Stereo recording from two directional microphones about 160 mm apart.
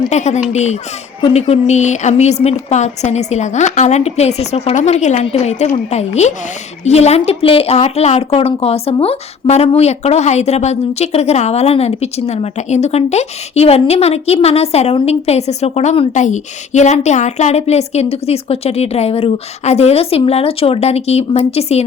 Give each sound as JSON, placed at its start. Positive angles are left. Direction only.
{"t": 0.1, "sound": "a woman's voice", "side_deg": 45}